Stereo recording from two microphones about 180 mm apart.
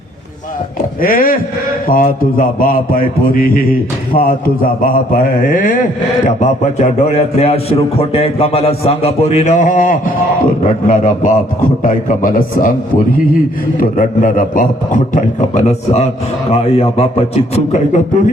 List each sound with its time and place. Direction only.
1.0 s a man's voice: 50° left (ahead or behind)